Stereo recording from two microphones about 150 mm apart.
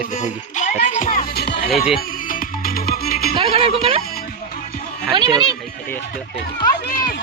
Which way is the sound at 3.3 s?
40° right (ahead or behind).